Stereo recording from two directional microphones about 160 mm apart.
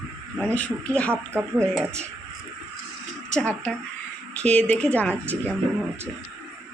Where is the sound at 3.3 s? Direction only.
5° left (ahead or behind).